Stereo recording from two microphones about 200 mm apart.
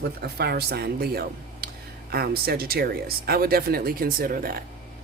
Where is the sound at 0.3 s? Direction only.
50° right (ahead or behind).